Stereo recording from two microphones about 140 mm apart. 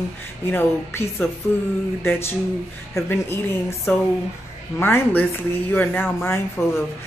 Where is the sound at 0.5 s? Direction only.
15° left (ahead or behind).